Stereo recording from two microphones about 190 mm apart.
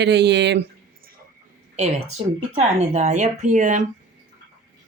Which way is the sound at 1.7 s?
35° right (ahead or behind).